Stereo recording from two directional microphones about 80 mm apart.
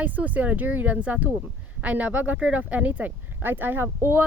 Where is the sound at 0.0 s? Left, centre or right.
Centre.